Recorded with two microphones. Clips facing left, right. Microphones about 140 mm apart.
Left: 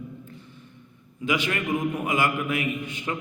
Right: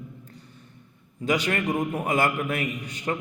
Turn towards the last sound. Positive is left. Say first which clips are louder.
# even
turn(degrees=-35)  # may be behind; listen again after turning